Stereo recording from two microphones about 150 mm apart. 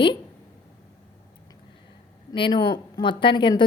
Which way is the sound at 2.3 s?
30° left (ahead or behind).